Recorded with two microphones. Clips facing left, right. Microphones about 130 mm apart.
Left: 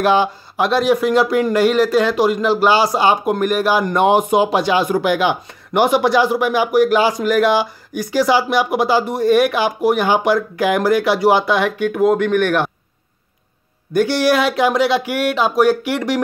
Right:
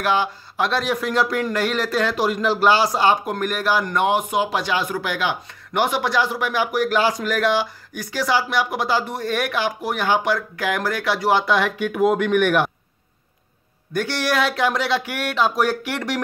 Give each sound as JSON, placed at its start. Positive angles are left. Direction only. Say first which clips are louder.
{"t": 0.0, "sound": "speech", "louder": "left 6 dB", "side_deg": 20}
{"t": 0.7, "sound": "a man's voice", "louder": "left 9 dB", "side_deg": 5}
{"t": 13.9, "sound": "a man's voice", "louder": "left 7 dB", "side_deg": 5}